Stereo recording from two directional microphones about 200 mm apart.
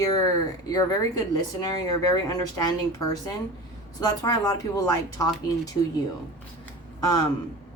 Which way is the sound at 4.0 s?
20° left (ahead or behind).